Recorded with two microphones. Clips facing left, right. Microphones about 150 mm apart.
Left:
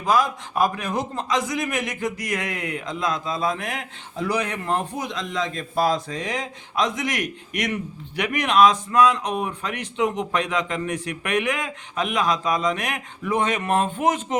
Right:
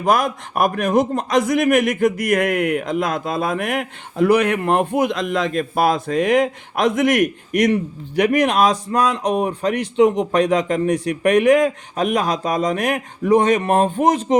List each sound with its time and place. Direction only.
0.0 s a man's voice: 60° right (ahead or behind); by 14.3 s 35° right (ahead or behind)